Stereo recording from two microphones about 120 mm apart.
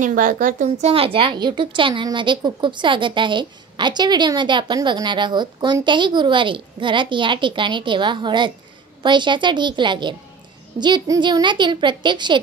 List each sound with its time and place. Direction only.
0.0 s a woman's voice: 90° right
0.9 s a woman's voice: 50° right (ahead or behind)